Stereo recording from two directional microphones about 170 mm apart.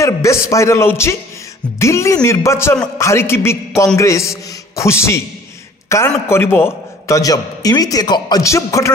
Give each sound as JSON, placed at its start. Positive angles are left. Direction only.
{"t": 0.0, "sound": "a man's voice", "side_deg": 20}